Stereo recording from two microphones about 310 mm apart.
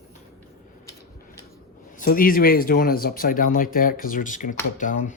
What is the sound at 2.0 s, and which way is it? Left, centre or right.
Speech, left.